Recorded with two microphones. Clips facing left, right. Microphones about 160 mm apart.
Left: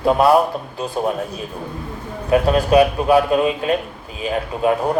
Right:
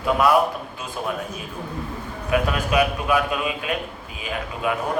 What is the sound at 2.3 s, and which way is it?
A man's voice, 35° left (ahead or behind).